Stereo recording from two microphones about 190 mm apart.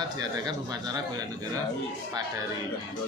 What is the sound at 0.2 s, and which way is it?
Speech, 20° right (ahead or behind).